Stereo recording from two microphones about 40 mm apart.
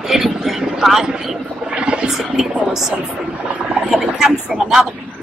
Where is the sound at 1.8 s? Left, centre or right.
Right.